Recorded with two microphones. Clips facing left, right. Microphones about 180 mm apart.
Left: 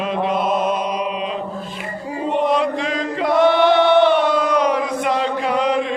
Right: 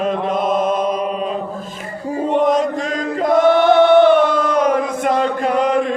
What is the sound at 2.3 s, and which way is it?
Chant, 45° right (ahead or behind).